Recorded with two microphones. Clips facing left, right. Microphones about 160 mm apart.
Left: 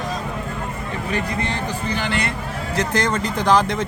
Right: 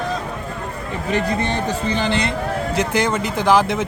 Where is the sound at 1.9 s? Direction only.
25° right (ahead or behind).